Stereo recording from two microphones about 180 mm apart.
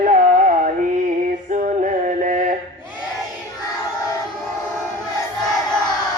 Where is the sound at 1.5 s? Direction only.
45° right (ahead or behind).